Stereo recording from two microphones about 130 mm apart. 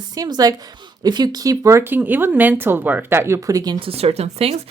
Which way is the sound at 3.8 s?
50° right (ahead or behind).